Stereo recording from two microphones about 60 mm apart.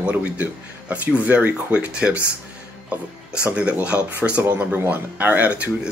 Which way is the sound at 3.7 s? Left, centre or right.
Right.